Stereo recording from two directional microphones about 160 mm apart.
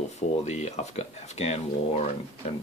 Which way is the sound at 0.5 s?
45° left (ahead or behind).